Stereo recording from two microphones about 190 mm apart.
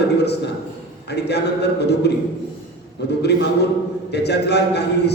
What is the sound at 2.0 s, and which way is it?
Speech, 60° left (ahead or behind).